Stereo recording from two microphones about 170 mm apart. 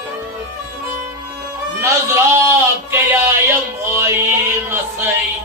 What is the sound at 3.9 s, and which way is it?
Music, 15° right (ahead or behind).